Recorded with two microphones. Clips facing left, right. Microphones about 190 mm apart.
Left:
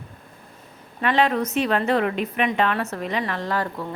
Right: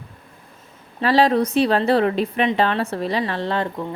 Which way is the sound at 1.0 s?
35° right (ahead or behind).